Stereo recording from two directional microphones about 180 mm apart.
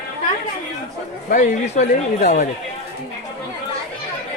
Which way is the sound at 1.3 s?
45° left (ahead or behind).